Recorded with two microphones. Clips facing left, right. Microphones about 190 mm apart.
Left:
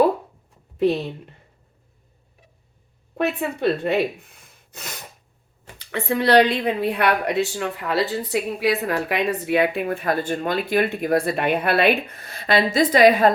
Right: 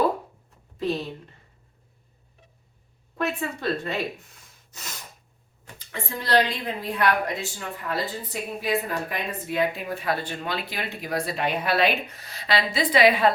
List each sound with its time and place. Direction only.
3.2 s a woman's voice: 65° left (ahead or behind)
5.8 s a woman's voice: 70° left (ahead or behind); by 13.3 s 45° left (ahead or behind)